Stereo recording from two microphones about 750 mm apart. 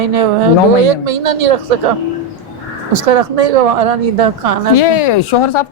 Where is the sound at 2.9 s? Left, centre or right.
Right.